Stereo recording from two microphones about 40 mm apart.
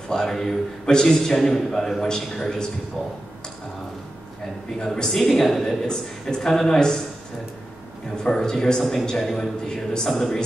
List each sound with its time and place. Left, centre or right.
0.1 s speech: centre
4.7 s speech: centre
8.2 s speech: centre